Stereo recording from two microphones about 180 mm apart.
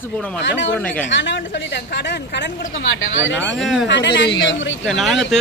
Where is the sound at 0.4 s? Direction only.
90° left.